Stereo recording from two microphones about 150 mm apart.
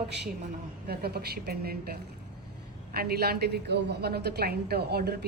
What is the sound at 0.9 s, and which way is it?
Speech, 90° right.